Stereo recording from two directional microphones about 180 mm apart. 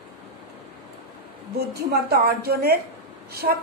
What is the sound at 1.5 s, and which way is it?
A woman's voice, 60° right (ahead or behind).